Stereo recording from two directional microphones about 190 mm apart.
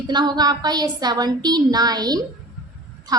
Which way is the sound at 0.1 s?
20° right (ahead or behind).